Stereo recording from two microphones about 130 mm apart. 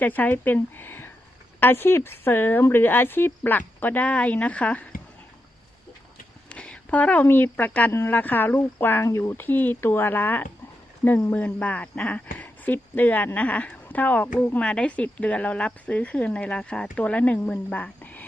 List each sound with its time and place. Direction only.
0.0 s speech: 15° left (ahead or behind)
6.5 s speech: 10° left (ahead or behind)